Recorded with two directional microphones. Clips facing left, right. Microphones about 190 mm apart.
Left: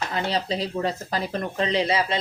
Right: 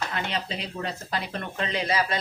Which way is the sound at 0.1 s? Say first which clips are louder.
Left 5 dB; 35° left (ahead or behind).